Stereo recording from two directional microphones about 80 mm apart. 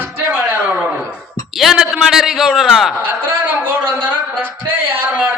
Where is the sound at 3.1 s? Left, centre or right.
Right.